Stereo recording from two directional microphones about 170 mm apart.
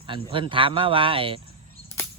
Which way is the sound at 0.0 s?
30° right (ahead or behind).